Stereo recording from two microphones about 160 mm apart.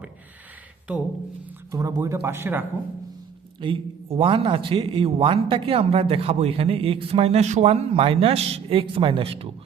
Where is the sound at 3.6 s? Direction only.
35° right (ahead or behind).